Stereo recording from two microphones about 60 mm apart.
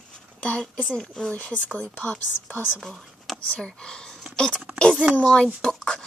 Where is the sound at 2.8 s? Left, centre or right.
Centre.